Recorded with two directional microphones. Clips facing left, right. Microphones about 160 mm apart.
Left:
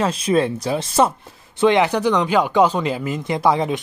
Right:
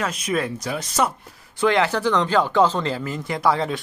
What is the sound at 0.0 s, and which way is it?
Speech, 30° left (ahead or behind).